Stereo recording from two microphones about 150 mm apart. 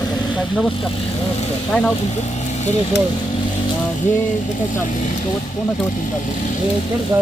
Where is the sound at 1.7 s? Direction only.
10° left (ahead or behind).